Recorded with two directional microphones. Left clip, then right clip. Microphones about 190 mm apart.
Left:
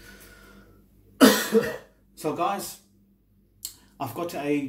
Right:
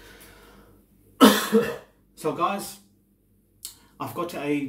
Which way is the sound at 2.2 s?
Centre (ahead or behind).